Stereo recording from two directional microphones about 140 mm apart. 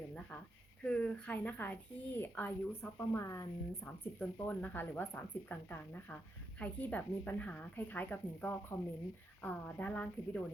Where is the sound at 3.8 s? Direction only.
10° left (ahead or behind).